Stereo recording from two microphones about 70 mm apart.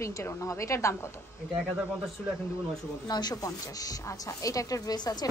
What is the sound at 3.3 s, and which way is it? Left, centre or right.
Speech, left.